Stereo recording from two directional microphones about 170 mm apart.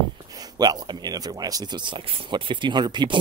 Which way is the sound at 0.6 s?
25° right (ahead or behind).